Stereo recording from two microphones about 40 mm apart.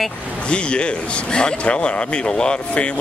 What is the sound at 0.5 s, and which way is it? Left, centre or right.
A man's voice, left.